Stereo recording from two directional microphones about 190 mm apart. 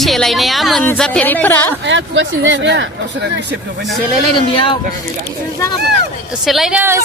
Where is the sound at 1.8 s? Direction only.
75° right (ahead or behind).